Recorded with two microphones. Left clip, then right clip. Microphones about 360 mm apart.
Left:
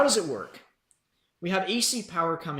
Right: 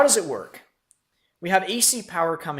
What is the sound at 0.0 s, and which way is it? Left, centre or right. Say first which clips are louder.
Speech: right 4 dB; centre.